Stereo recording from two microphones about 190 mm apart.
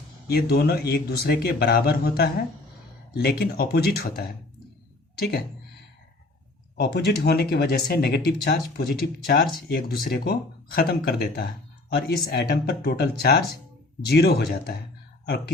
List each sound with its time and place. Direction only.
0.3 s speech: 55° left (ahead or behind)
5.2 s speech: 55° left (ahead or behind)
6.7 s speech: 60° left (ahead or behind)